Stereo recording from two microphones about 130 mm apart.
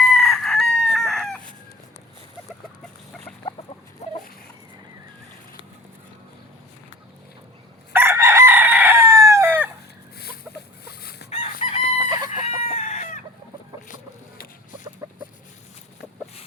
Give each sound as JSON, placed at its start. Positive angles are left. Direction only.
{"t": 0.1, "sound": "chicken", "side_deg": 5}
{"t": 4.0, "sound": "a sound", "side_deg": 60}
{"t": 7.9, "sound": "chicken", "side_deg": -20}
{"t": 11.3, "sound": "chicken", "side_deg": 55}
{"t": 15.0, "sound": "chicken", "side_deg": -30}